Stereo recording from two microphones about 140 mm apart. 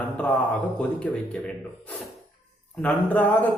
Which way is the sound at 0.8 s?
10° left (ahead or behind).